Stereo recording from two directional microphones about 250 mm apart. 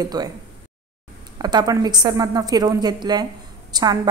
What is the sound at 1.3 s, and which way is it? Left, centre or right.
A woman's voice, centre.